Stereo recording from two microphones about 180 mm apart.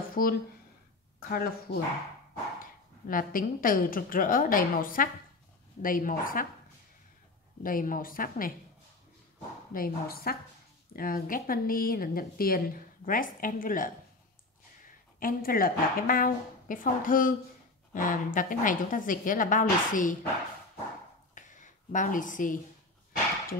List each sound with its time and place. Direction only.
0.1 s a woman's voice: 55° left (ahead or behind)
7.6 s a woman's voice: 50° left (ahead or behind)
9.7 s a woman's voice: 55° left (ahead or behind)
15.1 s a woman's voice: 55° left (ahead or behind)
21.4 s a sound: 45° left (ahead or behind)